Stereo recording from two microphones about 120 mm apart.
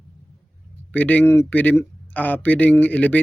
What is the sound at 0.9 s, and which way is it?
Speech, 15° left (ahead or behind).